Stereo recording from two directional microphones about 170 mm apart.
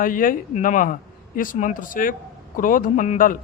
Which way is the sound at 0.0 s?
50° left (ahead or behind).